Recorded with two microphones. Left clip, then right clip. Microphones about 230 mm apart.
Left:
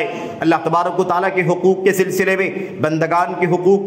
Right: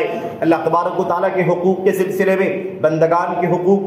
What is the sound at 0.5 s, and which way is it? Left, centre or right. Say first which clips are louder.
A man's voice: even; left.